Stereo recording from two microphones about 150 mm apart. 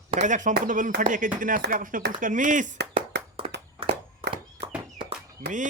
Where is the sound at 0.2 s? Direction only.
55° right (ahead or behind).